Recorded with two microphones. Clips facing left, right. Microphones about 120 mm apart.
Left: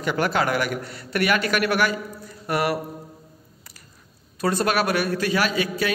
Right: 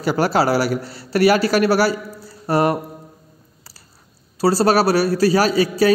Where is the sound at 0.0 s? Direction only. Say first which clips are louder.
Right 5 dB; 35° right (ahead or behind).